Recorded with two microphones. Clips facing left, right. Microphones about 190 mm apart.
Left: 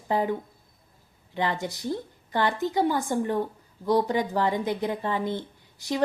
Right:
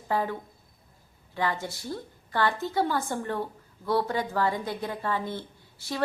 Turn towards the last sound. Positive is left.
turn(degrees=15)  # may be behind; listen again after turning